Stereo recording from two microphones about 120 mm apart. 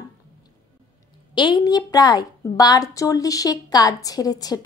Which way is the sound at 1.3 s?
35° left (ahead or behind).